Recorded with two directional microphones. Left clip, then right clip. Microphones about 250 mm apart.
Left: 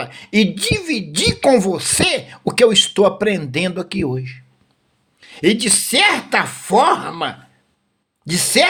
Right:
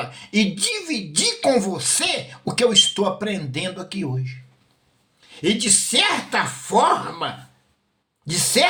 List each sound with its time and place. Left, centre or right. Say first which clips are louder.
0.0 s a woman's voice: left 5 dB; left